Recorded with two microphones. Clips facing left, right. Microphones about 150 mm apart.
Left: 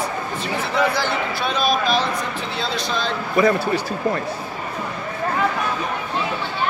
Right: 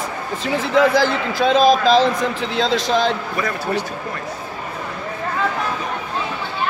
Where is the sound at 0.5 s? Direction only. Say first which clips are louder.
Right 6 dB; 90° right.